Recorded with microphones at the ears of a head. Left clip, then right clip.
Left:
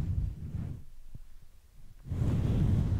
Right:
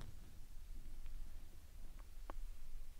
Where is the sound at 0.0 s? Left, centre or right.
Left.